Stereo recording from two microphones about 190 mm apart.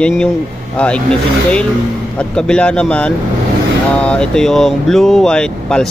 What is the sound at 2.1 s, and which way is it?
Speech, 5° left (ahead or behind).